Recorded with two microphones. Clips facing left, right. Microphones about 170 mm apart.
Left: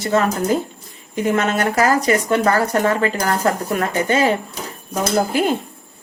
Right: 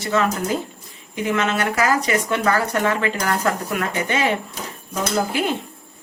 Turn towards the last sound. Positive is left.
turn(degrees=40)  # may be behind; listen again after turning